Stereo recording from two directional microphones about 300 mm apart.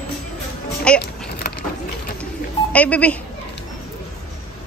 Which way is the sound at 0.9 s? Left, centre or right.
Centre.